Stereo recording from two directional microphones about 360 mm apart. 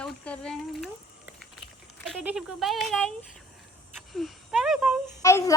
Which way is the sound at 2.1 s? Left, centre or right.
Centre.